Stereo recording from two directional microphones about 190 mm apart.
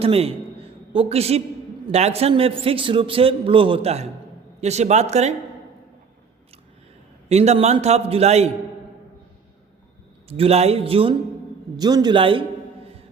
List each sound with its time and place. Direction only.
0.0 s a sound: 30° right (ahead or behind)
1.9 s a man's voice: 35° right (ahead or behind)
7.3 s a man's voice: 35° right (ahead or behind)
10.2 s a man's voice: 30° right (ahead or behind)